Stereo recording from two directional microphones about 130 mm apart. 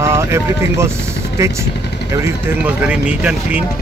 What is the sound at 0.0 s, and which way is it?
Speech, 20° right (ahead or behind).